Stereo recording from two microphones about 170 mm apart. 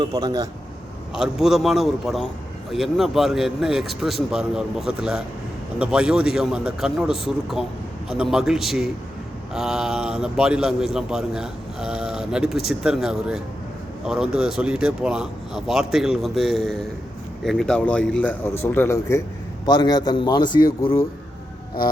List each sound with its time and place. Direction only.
0.0 s speech: 25° right (ahead or behind)
1.1 s a man's voice: 5° right (ahead or behind); by 20.7 s 25° left (ahead or behind)